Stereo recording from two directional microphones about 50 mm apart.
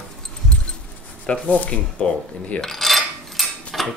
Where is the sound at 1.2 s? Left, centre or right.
Left.